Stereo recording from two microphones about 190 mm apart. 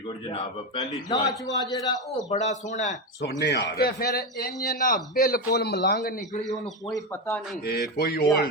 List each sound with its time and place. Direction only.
0.3 s a man's voice: 25° left (ahead or behind)
2.3 s a man's voice: 40° left (ahead or behind)
3.2 s a man's voice: 65° left (ahead or behind); by 6.4 s 45° left (ahead or behind)
6.8 s speech: 15° left (ahead or behind)
7.6 s a man's voice: 55° left (ahead or behind)